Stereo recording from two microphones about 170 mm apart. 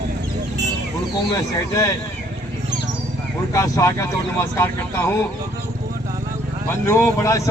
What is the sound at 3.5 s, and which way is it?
Speech, 20° left (ahead or behind).